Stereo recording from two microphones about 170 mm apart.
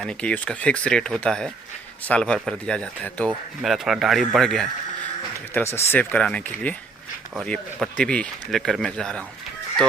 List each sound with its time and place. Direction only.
0.0 s speech: 5° left (ahead or behind)
5.5 s speech: 15° left (ahead or behind)